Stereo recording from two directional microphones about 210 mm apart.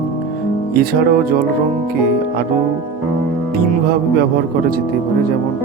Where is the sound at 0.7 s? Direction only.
45° right (ahead or behind).